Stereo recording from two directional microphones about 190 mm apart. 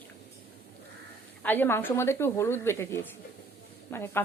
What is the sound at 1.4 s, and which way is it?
A woman's voice, 10° left (ahead or behind).